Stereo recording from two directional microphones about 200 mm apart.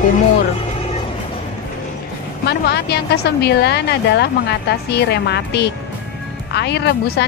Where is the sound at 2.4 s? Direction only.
55° left (ahead or behind).